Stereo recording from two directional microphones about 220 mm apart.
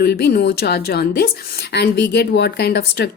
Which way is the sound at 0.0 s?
45° left (ahead or behind).